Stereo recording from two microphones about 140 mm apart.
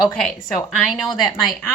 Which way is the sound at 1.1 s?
30° left (ahead or behind).